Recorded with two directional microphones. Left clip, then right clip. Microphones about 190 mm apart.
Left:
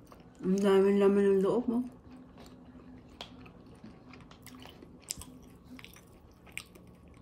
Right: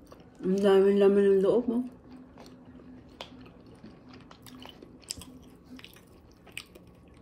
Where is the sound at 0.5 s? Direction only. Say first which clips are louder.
Right 4 dB; 55° left (ahead or behind).